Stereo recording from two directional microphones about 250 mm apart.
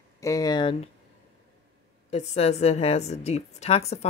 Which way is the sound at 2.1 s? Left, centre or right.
Left.